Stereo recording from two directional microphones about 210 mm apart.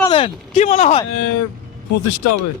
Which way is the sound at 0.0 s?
25° left (ahead or behind).